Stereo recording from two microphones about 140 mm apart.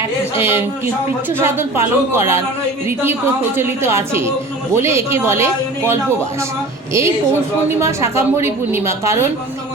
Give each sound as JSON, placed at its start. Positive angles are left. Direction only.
{"t": 0.3, "sound": "speech", "side_deg": -15}
{"t": 3.6, "sound": "speech", "side_deg": -15}
{"t": 7.8, "sound": "a woman's voice", "side_deg": -20}